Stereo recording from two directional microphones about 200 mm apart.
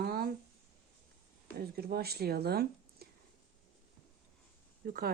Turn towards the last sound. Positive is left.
turn(degrees=-45)  # may be behind; listen again after turning